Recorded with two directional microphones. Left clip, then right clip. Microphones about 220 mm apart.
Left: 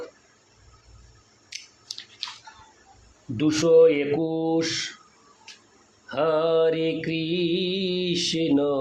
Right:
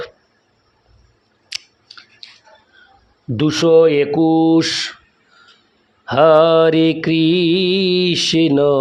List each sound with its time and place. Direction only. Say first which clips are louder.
1.5 s scissors: right 11 dB; 50° right (ahead or behind)
3.3 s mantra: right 6 dB; 45° right (ahead or behind)
6.1 s mantra: right 12 dB; 50° right (ahead or behind)